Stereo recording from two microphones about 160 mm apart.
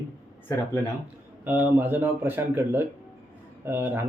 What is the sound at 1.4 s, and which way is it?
A man's voice, 10° right (ahead or behind).